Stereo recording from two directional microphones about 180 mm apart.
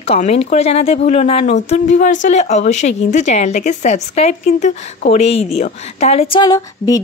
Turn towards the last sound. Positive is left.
turn(degrees=20)  # may be behind; listen again after turning